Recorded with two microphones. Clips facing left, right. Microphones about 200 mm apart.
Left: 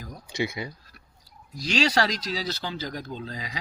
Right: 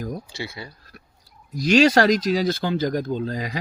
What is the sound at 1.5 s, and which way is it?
Speech, 50° right (ahead or behind).